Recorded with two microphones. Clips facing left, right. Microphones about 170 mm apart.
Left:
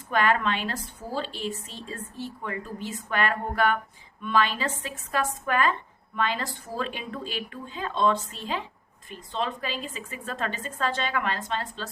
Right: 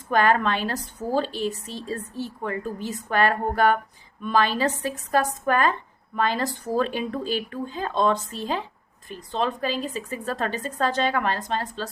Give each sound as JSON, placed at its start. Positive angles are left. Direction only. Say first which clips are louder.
{"t": 0.1, "sound": "a woman's voice", "louder": "right 4 dB", "side_deg": -40}